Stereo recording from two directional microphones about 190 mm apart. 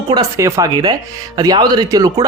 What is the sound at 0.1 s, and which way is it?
Speech, 15° right (ahead or behind).